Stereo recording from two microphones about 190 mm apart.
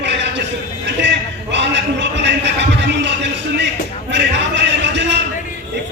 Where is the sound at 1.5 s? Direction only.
70° right (ahead or behind).